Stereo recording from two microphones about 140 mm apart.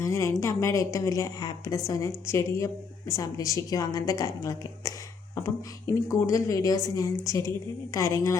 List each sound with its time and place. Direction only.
0.0 s a woman's voice: 20° left (ahead or behind)
6.1 s a woman's voice: 25° left (ahead or behind)